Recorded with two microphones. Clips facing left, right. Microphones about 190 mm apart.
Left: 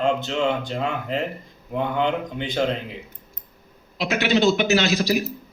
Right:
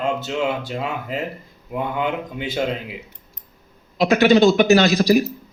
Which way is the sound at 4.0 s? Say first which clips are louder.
Right 7 dB; 45° right (ahead or behind).